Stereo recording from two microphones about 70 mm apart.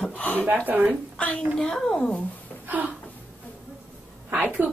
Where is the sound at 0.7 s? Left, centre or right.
Right.